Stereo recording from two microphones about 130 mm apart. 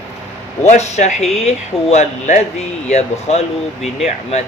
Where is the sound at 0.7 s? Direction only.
60° left (ahead or behind).